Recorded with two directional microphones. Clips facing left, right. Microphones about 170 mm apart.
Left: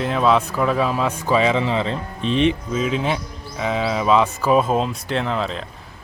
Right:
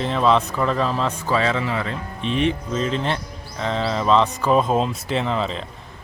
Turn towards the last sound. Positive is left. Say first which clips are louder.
# even
turn(degrees=0)  # may be behind; listen again after turning